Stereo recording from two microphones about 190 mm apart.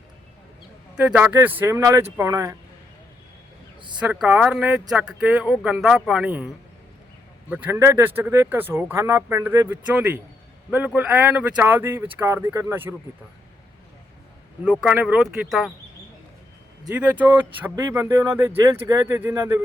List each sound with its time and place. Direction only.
0.9 s speech: 5° right (ahead or behind)
4.0 s speech: 5° right (ahead or behind)
7.5 s speech: 10° right (ahead or behind)
14.6 s speech: 5° right (ahead or behind)
16.9 s speech: 10° right (ahead or behind)